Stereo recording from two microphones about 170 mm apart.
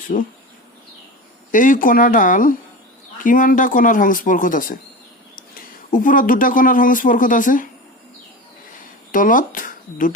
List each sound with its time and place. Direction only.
1.5 s speech: 50° left (ahead or behind)
5.9 s speech: 50° left (ahead or behind)
9.1 s speech: 50° left (ahead or behind)